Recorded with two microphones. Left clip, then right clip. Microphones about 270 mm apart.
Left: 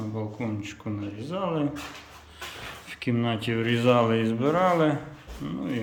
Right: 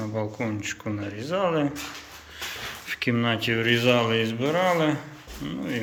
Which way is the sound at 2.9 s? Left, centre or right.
Centre.